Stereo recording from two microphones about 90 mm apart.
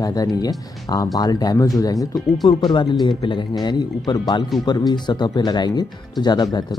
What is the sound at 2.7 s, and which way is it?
Speech, 55° left (ahead or behind).